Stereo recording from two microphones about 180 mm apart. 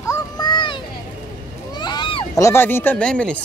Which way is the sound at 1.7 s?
25° left (ahead or behind).